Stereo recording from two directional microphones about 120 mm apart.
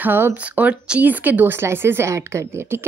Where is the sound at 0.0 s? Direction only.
15° right (ahead or behind).